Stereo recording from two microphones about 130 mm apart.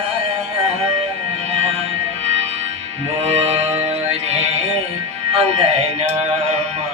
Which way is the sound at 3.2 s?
50° right (ahead or behind).